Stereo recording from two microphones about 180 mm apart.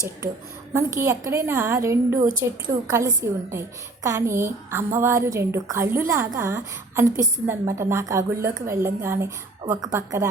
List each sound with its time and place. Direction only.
0.7 s a woman's voice: 15° right (ahead or behind)